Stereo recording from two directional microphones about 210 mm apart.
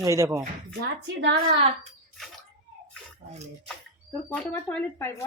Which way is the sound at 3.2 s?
55° right (ahead or behind).